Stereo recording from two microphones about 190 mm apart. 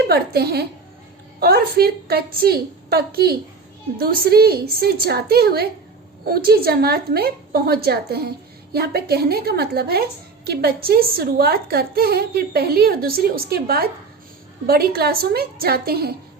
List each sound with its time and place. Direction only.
0.0 s a woman's voice: 55° right (ahead or behind)